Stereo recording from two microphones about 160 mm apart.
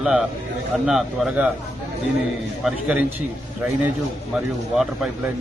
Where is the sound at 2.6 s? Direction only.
5° right (ahead or behind).